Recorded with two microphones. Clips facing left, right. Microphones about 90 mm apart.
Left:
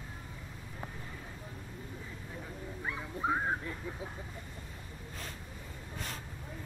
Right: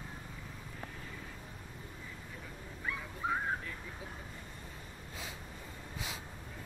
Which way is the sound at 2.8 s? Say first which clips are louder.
Left 3 dB; 25° left (ahead or behind).